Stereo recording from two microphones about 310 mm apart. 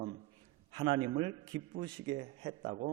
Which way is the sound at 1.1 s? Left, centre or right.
Centre.